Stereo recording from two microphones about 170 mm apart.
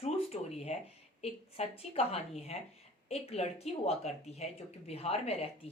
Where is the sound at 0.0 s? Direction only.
40° left (ahead or behind).